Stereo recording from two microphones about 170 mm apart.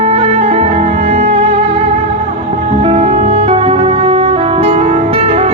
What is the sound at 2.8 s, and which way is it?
Music, 40° right (ahead or behind).